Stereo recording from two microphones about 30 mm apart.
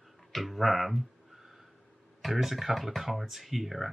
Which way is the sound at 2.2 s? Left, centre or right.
Centre.